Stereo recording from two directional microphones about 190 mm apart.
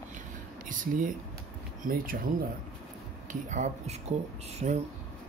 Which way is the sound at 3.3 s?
40° right (ahead or behind).